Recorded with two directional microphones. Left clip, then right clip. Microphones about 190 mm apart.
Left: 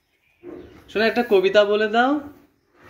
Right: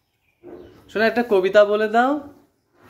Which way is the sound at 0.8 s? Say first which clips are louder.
Even; 5° right (ahead or behind).